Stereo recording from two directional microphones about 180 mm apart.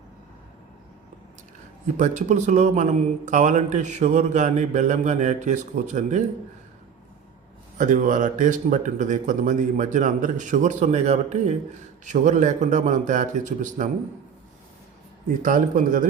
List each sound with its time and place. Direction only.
2.0 s a man's voice: 40° right (ahead or behind)
7.8 s speech: 45° right (ahead or behind)
15.4 s speech: 45° right (ahead or behind)